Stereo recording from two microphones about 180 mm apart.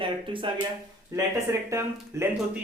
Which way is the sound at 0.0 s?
30° right (ahead or behind).